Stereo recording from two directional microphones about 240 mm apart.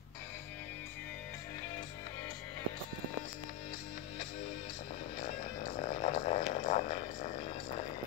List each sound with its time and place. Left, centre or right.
5.2 s music: left